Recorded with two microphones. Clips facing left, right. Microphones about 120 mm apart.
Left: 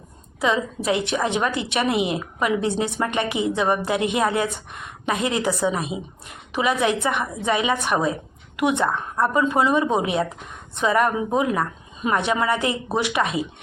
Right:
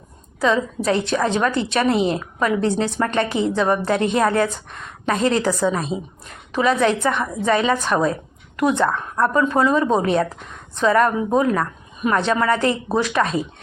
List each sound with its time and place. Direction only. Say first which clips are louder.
0.3 s a woman's voice: right 3 dB; 20° left (ahead or behind)